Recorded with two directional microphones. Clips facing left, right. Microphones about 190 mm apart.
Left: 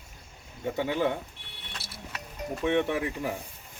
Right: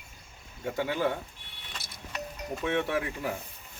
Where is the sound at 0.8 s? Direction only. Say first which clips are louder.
Left 1 dB; 20° left (ahead or behind).